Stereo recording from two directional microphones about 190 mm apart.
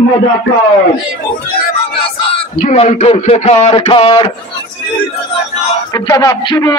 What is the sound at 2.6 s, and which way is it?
A man's voice, 40° left (ahead or behind).